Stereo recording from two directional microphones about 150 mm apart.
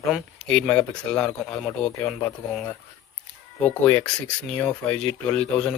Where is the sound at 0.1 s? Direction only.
5° left (ahead or behind).